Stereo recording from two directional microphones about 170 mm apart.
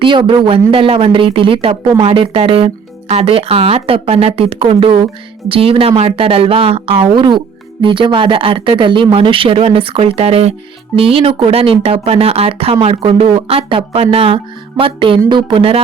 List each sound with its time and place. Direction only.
0.0 s speech: 30° right (ahead or behind)